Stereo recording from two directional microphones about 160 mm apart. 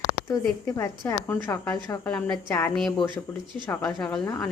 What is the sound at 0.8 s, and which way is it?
A woman's voice, 15° left (ahead or behind).